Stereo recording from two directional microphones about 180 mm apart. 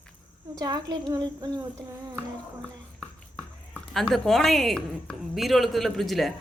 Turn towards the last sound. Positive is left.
turn(degrees=0)  # may be behind; listen again after turning